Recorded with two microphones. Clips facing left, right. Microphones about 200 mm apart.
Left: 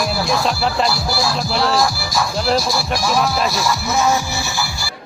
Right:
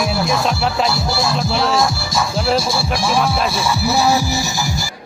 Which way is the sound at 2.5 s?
25° right (ahead or behind).